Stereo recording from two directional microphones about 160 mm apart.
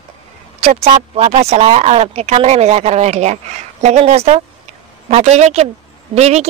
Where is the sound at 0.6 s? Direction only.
40° right (ahead or behind).